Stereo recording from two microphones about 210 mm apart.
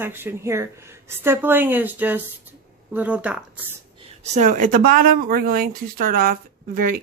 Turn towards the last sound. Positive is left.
turn(degrees=-45)  # may be behind; listen again after turning